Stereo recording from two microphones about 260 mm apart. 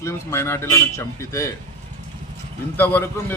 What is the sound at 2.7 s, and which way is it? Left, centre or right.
Speech, centre.